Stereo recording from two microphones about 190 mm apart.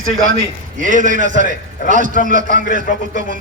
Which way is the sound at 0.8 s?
45° right (ahead or behind).